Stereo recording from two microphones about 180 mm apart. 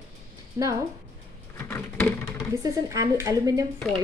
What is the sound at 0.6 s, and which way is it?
Speech, 15° right (ahead or behind).